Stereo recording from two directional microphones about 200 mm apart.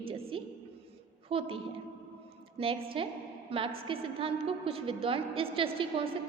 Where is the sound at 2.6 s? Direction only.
30° right (ahead or behind).